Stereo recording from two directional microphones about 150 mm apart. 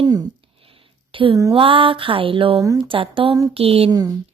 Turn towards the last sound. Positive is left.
turn(degrees=-40)  # may be behind; listen again after turning